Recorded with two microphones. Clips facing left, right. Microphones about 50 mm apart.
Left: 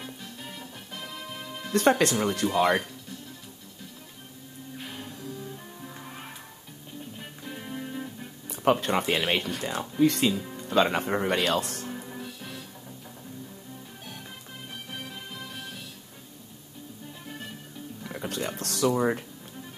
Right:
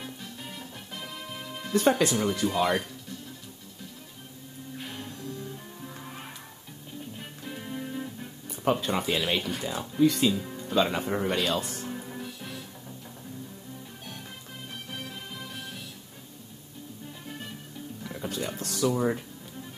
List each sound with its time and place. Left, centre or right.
0.0 s music: centre
1.7 s speech: left
2.4 s speech: left
4.7 s music: centre
8.5 s speech: left
11.8 s music: centre
14.9 s music: centre
18.0 s music: left
18.6 s speech: left